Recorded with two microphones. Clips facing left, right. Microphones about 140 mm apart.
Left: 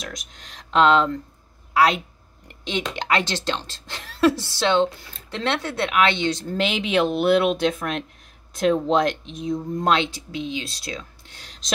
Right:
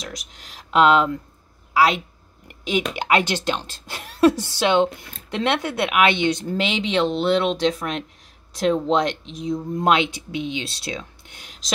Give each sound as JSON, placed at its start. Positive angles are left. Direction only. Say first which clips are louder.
{"t": 0.0, "sound": "speech", "louder": "even", "side_deg": 0}
{"t": 6.5, "sound": "speech", "louder": "even", "side_deg": 0}
{"t": 9.8, "sound": "speech", "louder": "right 2 dB", "side_deg": -15}